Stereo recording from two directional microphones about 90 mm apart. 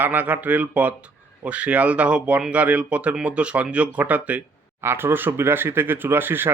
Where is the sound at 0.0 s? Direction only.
20° right (ahead or behind).